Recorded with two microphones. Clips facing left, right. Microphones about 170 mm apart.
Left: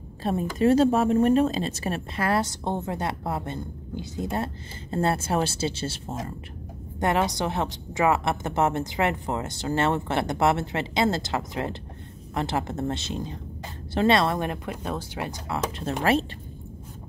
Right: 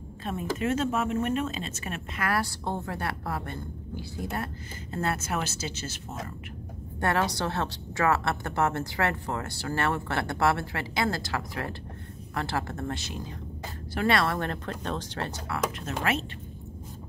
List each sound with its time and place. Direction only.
0.2 s speech: 35° left (ahead or behind)
7.0 s a woman's voice: 20° left (ahead or behind)
15.5 s speech: 30° left (ahead or behind)